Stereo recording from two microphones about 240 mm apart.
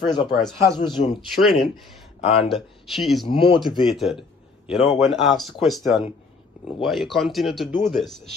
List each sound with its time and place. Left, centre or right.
0.0 s speech: centre
0.3 s speech: centre
0.7 s speech: centre
1.1 s speech: centre
3.3 s speech: left
3.8 s speech: centre